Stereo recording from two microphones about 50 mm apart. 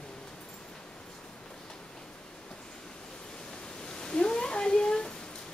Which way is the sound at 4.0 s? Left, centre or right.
Centre.